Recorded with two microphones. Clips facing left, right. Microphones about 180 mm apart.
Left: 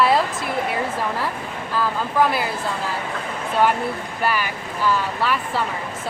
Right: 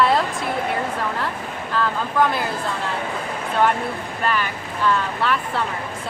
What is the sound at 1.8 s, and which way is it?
Speech, 5° left (ahead or behind).